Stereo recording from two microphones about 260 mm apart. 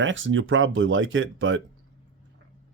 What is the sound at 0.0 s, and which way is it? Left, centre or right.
Speech, right.